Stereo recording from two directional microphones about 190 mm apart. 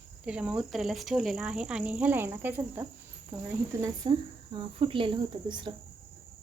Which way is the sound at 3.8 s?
25° right (ahead or behind).